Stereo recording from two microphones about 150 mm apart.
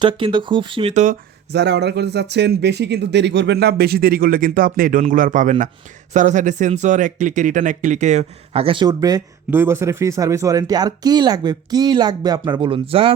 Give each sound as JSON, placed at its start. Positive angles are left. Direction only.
{"t": 0.0, "sound": "speech", "side_deg": -30}
{"t": 1.5, "sound": "speech", "side_deg": -90}